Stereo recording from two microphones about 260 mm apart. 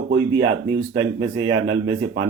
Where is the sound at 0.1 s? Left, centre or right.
Right.